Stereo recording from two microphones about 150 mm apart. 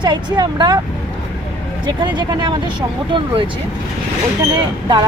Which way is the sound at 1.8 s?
30° right (ahead or behind).